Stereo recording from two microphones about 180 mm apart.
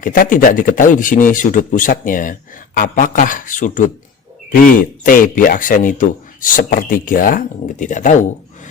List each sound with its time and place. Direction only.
0.0 s speech: 50° left (ahead or behind)